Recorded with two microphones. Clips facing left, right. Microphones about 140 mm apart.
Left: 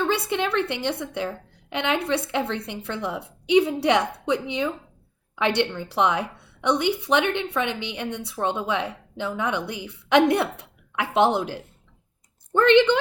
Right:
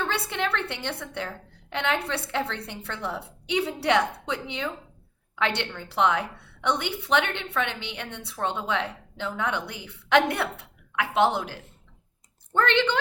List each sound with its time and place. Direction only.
0.0 s a woman's voice: 15° left (ahead or behind)